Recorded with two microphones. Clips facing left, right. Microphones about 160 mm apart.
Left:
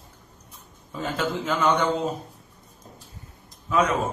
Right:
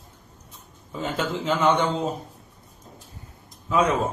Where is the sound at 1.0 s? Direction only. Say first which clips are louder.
Even; 25° right (ahead or behind).